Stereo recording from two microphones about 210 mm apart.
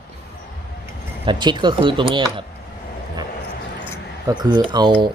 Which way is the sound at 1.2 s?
20° right (ahead or behind).